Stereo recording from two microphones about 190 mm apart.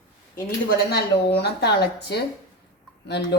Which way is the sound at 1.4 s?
60° left (ahead or behind).